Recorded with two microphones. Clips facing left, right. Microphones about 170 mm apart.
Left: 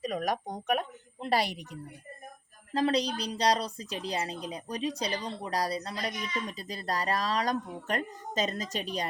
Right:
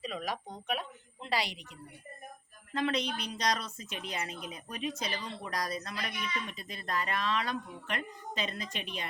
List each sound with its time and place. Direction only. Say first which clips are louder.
0.0 s a woman's voice: left 6 dB; 45° left (ahead or behind)